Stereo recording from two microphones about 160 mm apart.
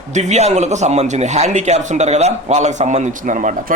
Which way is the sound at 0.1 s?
45° right (ahead or behind).